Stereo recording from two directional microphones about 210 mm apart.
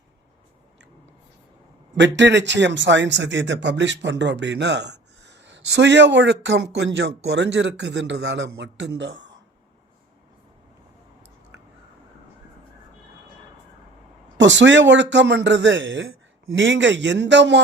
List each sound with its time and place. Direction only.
2.0 s a man's voice: 60° right (ahead or behind)
14.3 s a man's voice: 60° right (ahead or behind)